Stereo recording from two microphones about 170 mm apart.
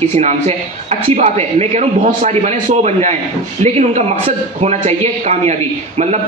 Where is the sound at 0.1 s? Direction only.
40° right (ahead or behind).